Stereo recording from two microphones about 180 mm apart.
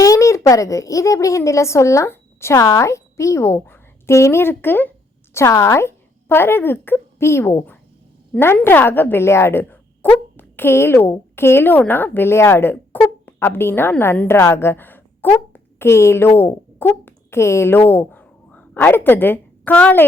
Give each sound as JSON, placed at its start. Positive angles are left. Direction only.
{"t": 0.0, "sound": "a woman's voice", "side_deg": 15}